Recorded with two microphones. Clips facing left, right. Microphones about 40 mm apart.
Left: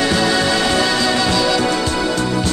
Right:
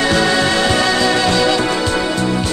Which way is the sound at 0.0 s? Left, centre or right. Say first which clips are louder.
Right 2 dB; centre.